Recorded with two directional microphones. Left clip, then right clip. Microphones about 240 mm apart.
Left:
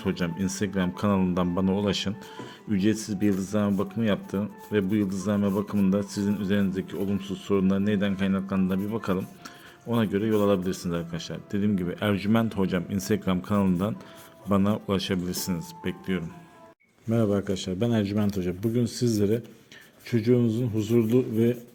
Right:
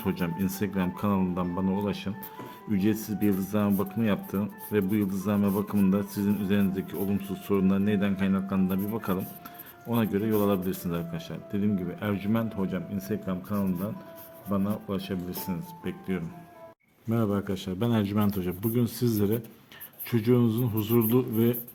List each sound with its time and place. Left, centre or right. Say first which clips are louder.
0.0 s speech: left 1 dB; centre
2.6 s a man's voice: left 2 dB; centre